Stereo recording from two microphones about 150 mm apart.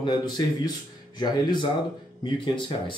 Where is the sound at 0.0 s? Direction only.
30° left (ahead or behind).